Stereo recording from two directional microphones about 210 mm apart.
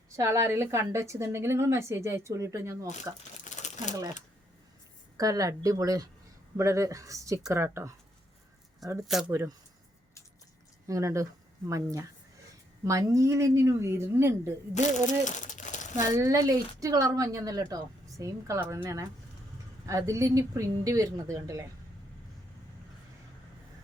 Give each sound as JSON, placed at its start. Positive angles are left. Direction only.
{"t": 0.2, "sound": "a woman's voice", "side_deg": -15}
{"t": 3.5, "sound": "crumpling", "side_deg": 35}
{"t": 5.1, "sound": "a woman's voice", "side_deg": -15}
{"t": 9.3, "sound": "a woman's voice", "side_deg": -15}
{"t": 10.8, "sound": "a woman's voice", "side_deg": -15}
{"t": 15.0, "sound": "a sound", "side_deg": 35}
{"t": 16.0, "sound": "a woman's voice", "side_deg": -15}